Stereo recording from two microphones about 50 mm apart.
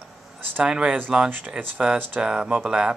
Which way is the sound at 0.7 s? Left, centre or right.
Centre.